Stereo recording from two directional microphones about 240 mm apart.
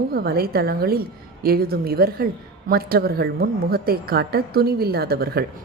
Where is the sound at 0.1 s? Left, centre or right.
Right.